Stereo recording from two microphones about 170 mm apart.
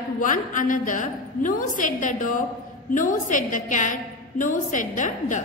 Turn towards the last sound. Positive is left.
turn(degrees=50)  # may be behind; listen again after turning